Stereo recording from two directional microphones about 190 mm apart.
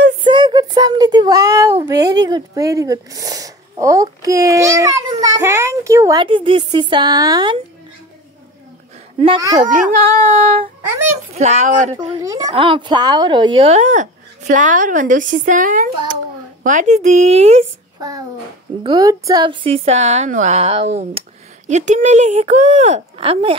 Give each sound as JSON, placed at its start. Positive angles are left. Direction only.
{"t": 0.3, "sound": "a sound", "side_deg": -25}
{"t": 1.9, "sound": "a woman's voice", "side_deg": -20}
{"t": 6.2, "sound": "a woman's voice", "side_deg": -25}
{"t": 9.7, "sound": "a woman's voice", "side_deg": -40}
{"t": 10.2, "sound": "female singing", "side_deg": -45}
{"t": 11.3, "sound": "a woman's voice", "side_deg": -35}
{"t": 12.2, "sound": "a woman's voice", "side_deg": -20}
{"t": 18.8, "sound": "a woman's voice", "side_deg": -20}